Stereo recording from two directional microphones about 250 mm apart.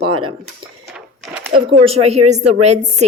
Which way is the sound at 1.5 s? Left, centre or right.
Right.